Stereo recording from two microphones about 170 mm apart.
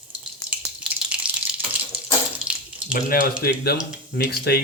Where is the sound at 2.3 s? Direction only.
5° right (ahead or behind).